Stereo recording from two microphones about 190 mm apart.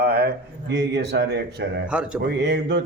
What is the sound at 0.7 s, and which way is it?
Speech, 65° right (ahead or behind).